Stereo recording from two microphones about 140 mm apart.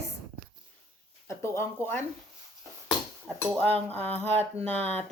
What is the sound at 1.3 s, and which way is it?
Speech, 20° left (ahead or behind).